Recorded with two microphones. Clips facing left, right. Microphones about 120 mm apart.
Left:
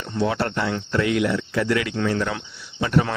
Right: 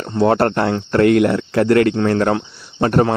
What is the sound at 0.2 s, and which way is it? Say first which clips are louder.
Speech: right 8 dB; 50° right (ahead or behind).